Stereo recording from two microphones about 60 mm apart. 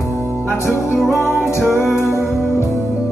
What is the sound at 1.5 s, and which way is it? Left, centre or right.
Music, left.